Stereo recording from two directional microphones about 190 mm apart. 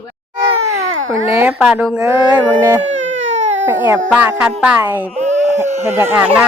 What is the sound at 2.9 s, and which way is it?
Baby cry, 40° right (ahead or behind).